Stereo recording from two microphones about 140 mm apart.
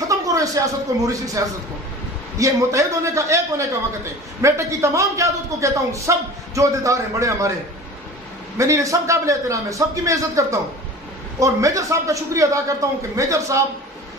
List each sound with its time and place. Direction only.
0.1 s a man's voice: 25° right (ahead or behind)
8.5 s a man's voice: 20° right (ahead or behind)